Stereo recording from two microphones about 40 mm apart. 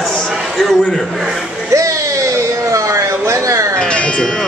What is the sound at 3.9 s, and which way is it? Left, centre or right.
Music, left.